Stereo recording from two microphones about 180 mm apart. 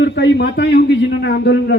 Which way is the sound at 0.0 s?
70° left (ahead or behind).